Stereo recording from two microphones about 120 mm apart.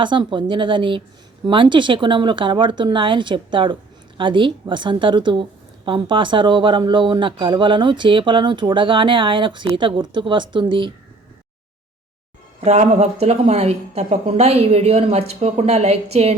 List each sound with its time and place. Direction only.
0.0 s a woman's voice: 40° right (ahead or behind)
12.5 s a woman's voice: 65° right (ahead or behind)